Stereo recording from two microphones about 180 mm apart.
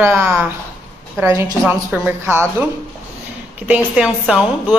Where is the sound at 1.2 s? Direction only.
15° right (ahead or behind).